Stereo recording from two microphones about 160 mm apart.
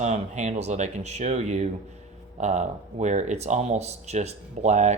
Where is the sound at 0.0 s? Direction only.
45° right (ahead or behind).